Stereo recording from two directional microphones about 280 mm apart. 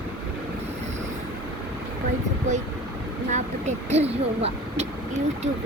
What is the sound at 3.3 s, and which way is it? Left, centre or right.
Vehicle, right.